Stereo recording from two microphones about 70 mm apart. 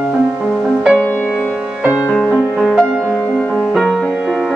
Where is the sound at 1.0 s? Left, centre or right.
Left.